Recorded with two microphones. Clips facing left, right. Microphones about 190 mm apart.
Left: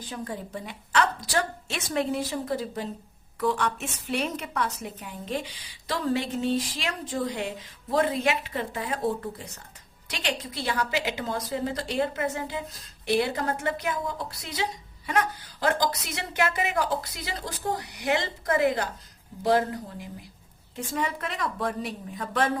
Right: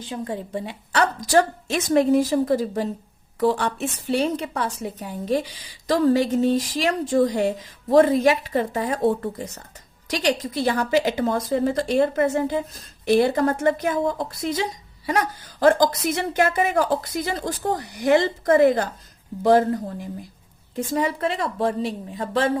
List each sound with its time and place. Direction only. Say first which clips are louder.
0.3 s a woman's voice: right 6 dB; 30° right (ahead or behind)
1.2 s a woman's voice: right 9 dB; 45° right (ahead or behind)
20.7 s a woman's voice: right 7 dB; 35° right (ahead or behind)